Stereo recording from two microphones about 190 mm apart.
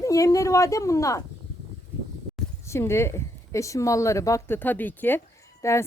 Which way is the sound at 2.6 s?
15° left (ahead or behind).